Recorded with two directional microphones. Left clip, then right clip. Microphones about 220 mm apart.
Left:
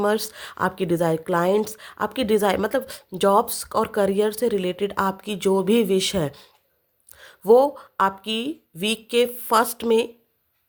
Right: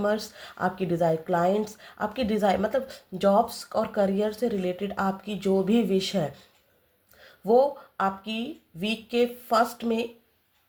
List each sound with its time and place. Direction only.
0.0 s speech: 45° left (ahead or behind)